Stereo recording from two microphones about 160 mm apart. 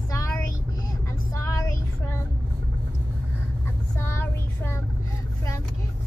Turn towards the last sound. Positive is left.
turn(degrees=15)  # may be behind; listen again after turning